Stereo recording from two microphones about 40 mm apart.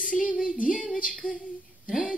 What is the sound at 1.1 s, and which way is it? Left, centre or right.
Female singing, centre.